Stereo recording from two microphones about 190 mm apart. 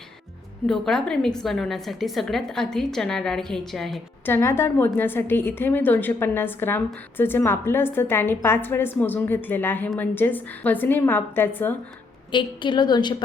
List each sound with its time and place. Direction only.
0.7 s a woman's voice: 5° left (ahead or behind)
4.3 s a woman's voice: 15° left (ahead or behind)
12.3 s a woman's voice: 25° left (ahead or behind)